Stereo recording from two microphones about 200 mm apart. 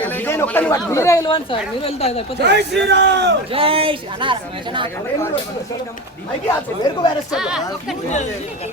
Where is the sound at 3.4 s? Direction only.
25° right (ahead or behind).